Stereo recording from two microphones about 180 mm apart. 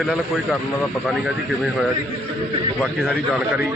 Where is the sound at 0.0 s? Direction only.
Centre (ahead or behind).